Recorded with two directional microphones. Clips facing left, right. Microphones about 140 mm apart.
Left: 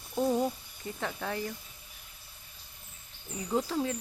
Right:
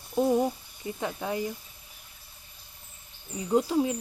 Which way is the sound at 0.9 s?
15° right (ahead or behind).